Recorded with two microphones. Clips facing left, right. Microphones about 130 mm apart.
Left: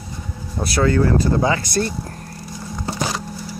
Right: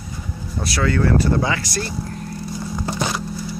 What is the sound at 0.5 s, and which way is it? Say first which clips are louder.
Speech: left 3 dB; 30° left (ahead or behind).